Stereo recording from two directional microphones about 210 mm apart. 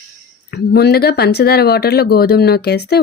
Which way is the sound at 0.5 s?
50° left (ahead or behind).